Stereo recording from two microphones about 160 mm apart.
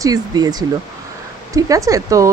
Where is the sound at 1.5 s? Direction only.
20° right (ahead or behind).